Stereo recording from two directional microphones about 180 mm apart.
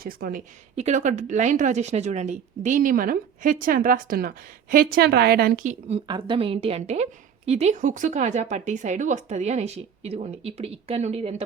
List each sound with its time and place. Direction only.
0.0 s speech: 55° right (ahead or behind)
0.8 s speech: 40° right (ahead or behind)
5.9 s a woman's voice: 25° right (ahead or behind)